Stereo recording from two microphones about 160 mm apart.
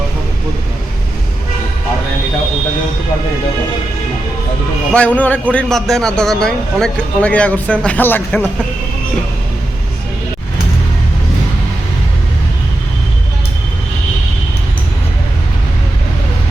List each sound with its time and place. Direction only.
4.9 s a man's voice: 10° left (ahead or behind)